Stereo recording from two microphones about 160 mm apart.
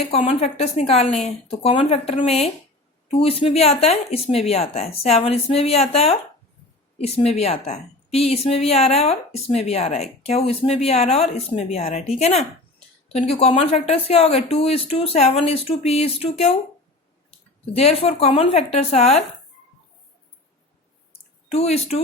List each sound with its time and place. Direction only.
0.1 s a woman's voice: 40° left (ahead or behind)
17.7 s a woman's voice: 40° left (ahead or behind)
21.1 s a sound: 40° left (ahead or behind)